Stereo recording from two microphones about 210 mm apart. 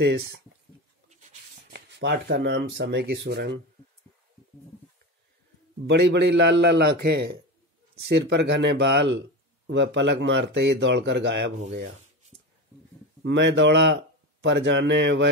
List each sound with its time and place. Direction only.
0.0 s speech: 55° right (ahead or behind)
1.0 s a sound: 35° right (ahead or behind)
1.9 s speech: 55° right (ahead or behind)
5.9 s speech: 55° right (ahead or behind)
13.2 s speech: 55° right (ahead or behind)